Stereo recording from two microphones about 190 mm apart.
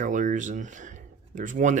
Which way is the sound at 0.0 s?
40° right (ahead or behind).